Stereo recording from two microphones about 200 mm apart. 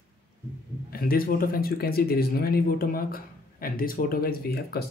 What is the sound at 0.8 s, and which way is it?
Speech, 50° left (ahead or behind).